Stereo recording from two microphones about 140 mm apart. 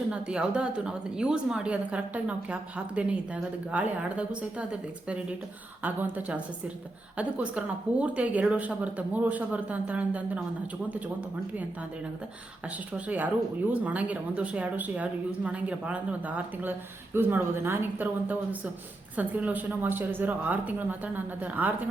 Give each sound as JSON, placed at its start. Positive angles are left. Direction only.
{"t": 0.1, "sound": "a woman's voice", "side_deg": -5}
{"t": 13.1, "sound": "a woman's voice", "side_deg": -10}